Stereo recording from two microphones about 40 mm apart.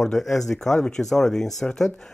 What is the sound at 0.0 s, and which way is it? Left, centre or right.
Speech, centre.